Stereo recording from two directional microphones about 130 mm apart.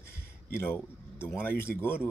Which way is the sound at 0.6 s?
15° left (ahead or behind).